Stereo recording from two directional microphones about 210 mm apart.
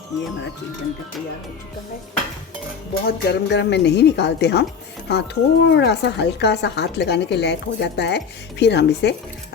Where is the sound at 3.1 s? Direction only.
50° left (ahead or behind).